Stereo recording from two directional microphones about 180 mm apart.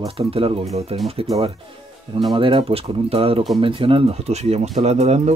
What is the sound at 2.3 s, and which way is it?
Speech, 30° right (ahead or behind).